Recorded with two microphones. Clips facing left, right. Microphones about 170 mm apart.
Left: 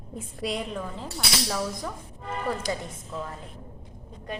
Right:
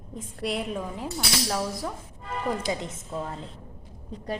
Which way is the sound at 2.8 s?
25° right (ahead or behind).